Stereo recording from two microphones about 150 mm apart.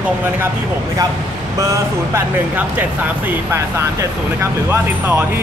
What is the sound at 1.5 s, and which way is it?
Speech, 20° right (ahead or behind).